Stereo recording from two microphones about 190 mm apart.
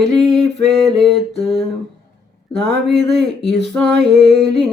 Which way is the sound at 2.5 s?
65° right (ahead or behind).